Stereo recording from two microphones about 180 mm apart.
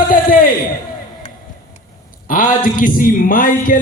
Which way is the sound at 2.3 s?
50° left (ahead or behind).